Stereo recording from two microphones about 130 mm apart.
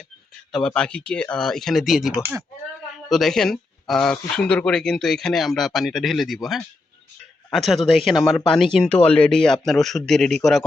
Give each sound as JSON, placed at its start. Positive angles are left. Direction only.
{"t": 0.5, "sound": "speech", "side_deg": 5}
{"t": 8.9, "sound": "speech", "side_deg": 50}
{"t": 9.1, "sound": "speech", "side_deg": 5}